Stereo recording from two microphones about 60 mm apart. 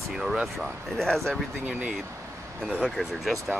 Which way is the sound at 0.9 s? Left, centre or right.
Centre.